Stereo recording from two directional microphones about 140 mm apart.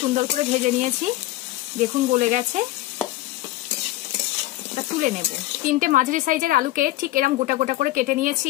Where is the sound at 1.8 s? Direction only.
60° right (ahead or behind).